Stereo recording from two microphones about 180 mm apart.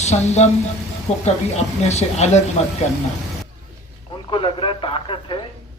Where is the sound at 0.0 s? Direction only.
40° left (ahead or behind).